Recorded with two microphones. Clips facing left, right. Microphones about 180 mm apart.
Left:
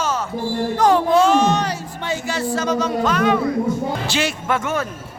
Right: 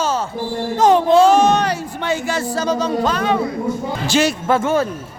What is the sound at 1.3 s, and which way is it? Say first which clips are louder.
Music: right 3 dB; 50° right (ahead or behind).